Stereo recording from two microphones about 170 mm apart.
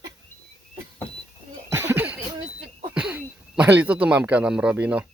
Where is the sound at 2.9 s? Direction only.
5° right (ahead or behind).